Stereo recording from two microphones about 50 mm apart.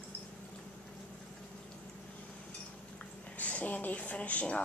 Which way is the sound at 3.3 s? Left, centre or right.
Left.